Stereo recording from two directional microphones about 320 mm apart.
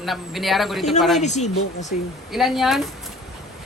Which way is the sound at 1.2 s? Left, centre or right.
Left.